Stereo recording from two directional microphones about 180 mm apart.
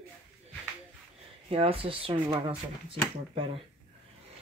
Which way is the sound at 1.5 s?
30° right (ahead or behind).